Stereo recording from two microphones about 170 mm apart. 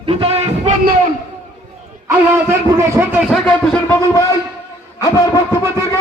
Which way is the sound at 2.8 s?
15° right (ahead or behind).